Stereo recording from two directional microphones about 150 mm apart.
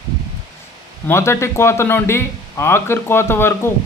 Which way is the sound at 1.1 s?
15° left (ahead or behind).